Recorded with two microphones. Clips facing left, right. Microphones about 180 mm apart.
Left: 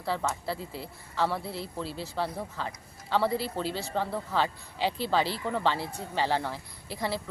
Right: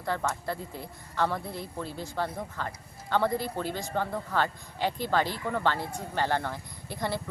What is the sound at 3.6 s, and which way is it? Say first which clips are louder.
Speech: even; 15° right (ahead or behind).